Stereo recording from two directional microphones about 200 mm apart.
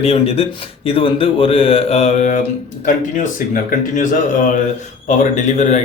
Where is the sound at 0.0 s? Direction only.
30° left (ahead or behind).